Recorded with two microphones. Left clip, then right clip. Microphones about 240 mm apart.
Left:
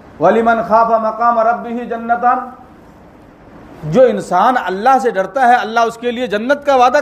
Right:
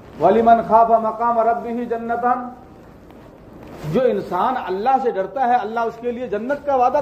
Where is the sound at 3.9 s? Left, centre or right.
Left.